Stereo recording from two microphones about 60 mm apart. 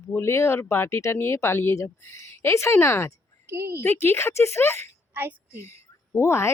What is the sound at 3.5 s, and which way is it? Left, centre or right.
Speech, right.